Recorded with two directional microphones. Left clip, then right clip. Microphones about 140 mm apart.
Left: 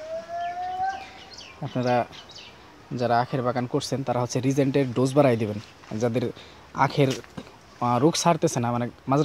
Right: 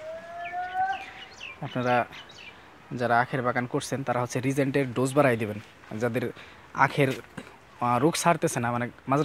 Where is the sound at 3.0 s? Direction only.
5° left (ahead or behind).